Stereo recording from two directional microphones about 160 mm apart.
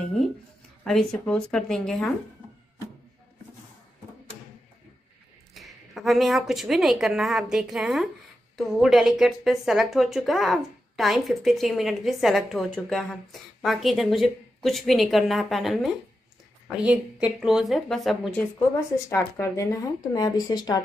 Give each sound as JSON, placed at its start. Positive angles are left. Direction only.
{"t": 0.8, "sound": "a woman's voice", "side_deg": 0}
{"t": 5.5, "sound": "a woman's voice", "side_deg": 0}
{"t": 19.0, "sound": "speech", "side_deg": 15}